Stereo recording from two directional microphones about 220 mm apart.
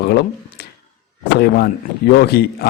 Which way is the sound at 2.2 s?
45° left (ahead or behind).